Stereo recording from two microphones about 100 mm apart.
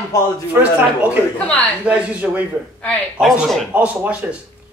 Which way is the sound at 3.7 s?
15° right (ahead or behind).